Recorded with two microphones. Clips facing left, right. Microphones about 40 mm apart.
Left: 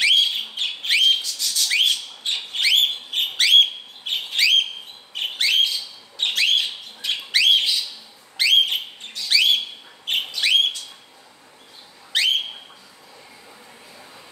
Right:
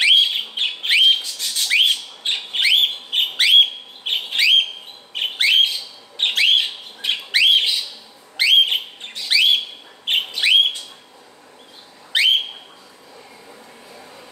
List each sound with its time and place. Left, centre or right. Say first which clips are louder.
0.0 s whistle: right 3 dB; right
3.3 s bird: right 1 dB; centre
4.0 s a sound: right 2 dB; right
5.1 s bird: right 4 dB; centre
8.4 s a sound: right 3 dB; centre
10.3 s bird: right 3 dB; right
12.1 s bird: right 4 dB; right